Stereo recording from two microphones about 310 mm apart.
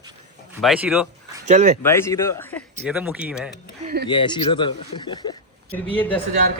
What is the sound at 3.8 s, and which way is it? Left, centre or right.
Speech, right.